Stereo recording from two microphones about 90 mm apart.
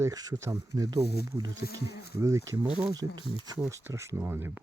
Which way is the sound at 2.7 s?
10° right (ahead or behind).